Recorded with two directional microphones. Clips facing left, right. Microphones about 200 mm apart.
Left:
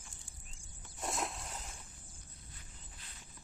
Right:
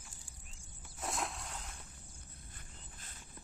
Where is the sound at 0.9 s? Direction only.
Centre (ahead or behind).